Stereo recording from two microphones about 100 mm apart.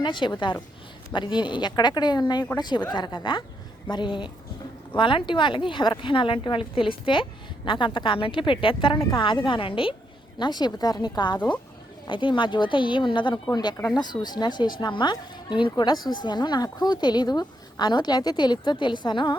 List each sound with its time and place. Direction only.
0.0 s a woman's voice: 50° left (ahead or behind)
10.3 s a woman's voice: 45° left (ahead or behind)